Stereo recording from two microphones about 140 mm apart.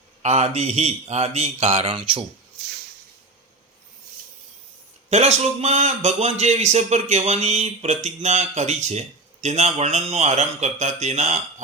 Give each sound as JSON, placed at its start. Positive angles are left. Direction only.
{"t": 0.2, "sound": "a man's voice", "side_deg": -50}
{"t": 5.0, "sound": "a man's voice", "side_deg": -50}